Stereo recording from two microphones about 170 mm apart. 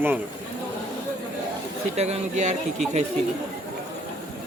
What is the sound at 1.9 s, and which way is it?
Speech, 40° right (ahead or behind).